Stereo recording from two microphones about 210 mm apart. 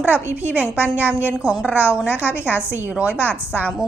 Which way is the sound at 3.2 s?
10° left (ahead or behind).